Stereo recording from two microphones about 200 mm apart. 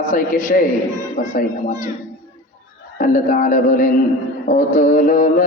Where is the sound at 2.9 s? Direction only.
45° left (ahead or behind).